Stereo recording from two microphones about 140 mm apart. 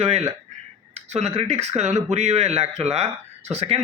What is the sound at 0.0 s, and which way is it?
Speech, 45° right (ahead or behind).